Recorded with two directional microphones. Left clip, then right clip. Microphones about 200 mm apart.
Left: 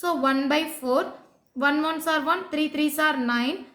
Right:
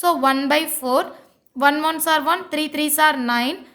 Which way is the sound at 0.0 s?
45° right (ahead or behind).